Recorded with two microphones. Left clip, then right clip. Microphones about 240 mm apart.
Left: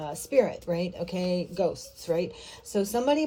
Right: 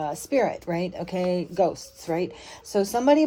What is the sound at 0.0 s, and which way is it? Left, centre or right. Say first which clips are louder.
Speech: right 1 dB; right.